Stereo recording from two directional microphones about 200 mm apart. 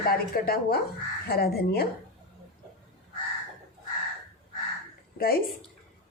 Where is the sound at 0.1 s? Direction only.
50° left (ahead or behind).